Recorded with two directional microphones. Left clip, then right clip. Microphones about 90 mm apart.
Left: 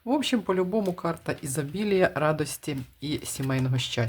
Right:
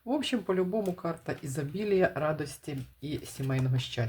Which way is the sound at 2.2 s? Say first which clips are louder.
Left 6 dB; 45° left (ahead or behind).